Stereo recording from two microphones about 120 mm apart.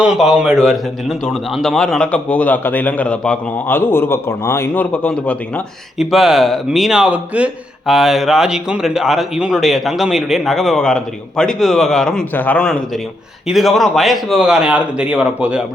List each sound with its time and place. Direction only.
0.0 s a man's voice: 5° right (ahead or behind); by 5.6 s 10° left (ahead or behind)
6.0 s a man's voice: centre (ahead or behind)